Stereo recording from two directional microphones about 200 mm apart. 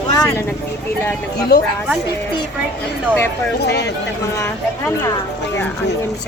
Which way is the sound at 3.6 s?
55° left (ahead or behind).